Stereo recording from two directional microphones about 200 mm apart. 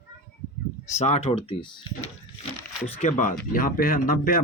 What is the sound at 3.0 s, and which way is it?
Speech, 35° left (ahead or behind).